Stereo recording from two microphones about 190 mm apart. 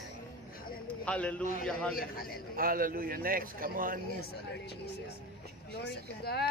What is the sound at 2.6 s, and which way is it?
A man's voice, 50° right (ahead or behind).